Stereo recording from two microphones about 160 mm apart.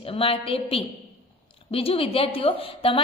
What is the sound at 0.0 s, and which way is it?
A woman's voice, 35° left (ahead or behind).